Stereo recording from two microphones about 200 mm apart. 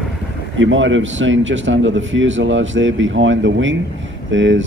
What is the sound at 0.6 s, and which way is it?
A man's voice, 70° right (ahead or behind).